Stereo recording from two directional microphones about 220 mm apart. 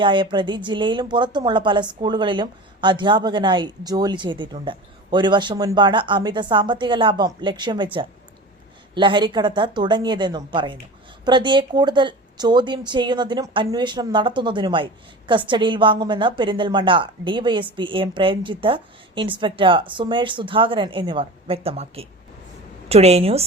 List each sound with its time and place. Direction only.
0.0 s speech: 20° right (ahead or behind)